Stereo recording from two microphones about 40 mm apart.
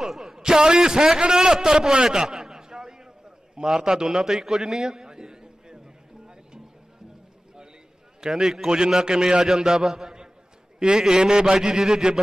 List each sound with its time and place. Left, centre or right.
0.0 s a man's voice: centre
2.1 s a sound: centre
3.5 s a man's voice: centre
4.3 s a sound: centre
8.3 s a man's voice: centre
8.6 s a man's voice: right